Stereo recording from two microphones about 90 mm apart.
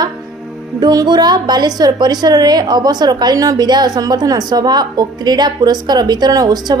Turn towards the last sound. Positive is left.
turn(degrees=-45)  # may be behind; listen again after turning